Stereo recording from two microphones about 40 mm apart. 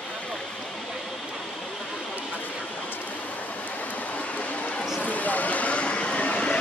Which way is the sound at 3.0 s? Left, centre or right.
Left.